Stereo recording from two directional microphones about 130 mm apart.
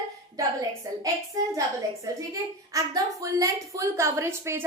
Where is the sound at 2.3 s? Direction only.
25° right (ahead or behind).